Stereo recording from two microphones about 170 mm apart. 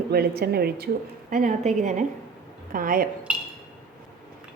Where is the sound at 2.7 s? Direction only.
55° right (ahead or behind).